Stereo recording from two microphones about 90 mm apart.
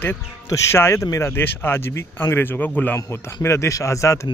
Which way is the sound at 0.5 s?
30° left (ahead or behind).